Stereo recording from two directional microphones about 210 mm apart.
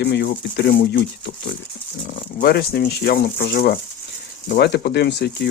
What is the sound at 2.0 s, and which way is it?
Speech, 45° left (ahead or behind).